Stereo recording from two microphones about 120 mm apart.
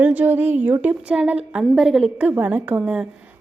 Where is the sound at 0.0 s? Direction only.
15° right (ahead or behind).